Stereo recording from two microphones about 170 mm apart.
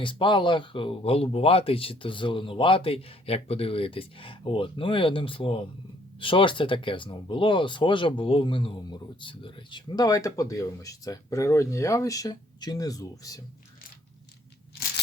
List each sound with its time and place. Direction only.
0.0 s speech: 30° left (ahead or behind)